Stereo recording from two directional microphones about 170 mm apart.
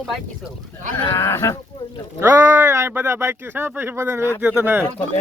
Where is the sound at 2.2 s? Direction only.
15° right (ahead or behind).